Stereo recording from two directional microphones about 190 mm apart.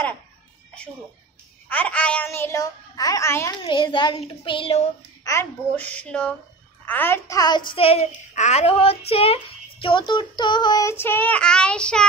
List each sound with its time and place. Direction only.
1.7 s speech: 5° left (ahead or behind)
3.6 s a child's voice: 25° left (ahead or behind)
5.3 s a child's voice: 10° left (ahead or behind); by 8.0 s 30° left (ahead or behind)
8.4 s child singing: 35° left (ahead or behind)
9.1 s speech: 30° left (ahead or behind); by 12.1 s 5° left (ahead or behind)